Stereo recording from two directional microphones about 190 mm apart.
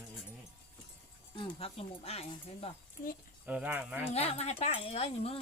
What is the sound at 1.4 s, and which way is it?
Speech, 30° left (ahead or behind).